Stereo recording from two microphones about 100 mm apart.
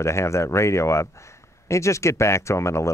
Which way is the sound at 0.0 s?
30° left (ahead or behind).